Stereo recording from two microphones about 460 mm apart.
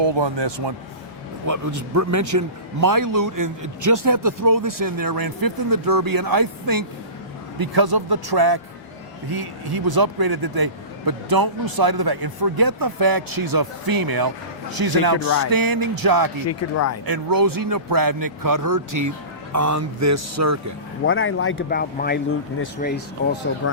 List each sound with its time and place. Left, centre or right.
0.0 s speech: right
1.5 s a man's voice: right
16.5 s speech: left
17.1 s a man's voice: right
21.0 s speech: left